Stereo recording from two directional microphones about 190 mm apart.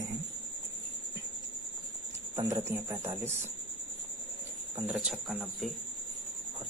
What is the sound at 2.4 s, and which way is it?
Speech, 15° right (ahead or behind).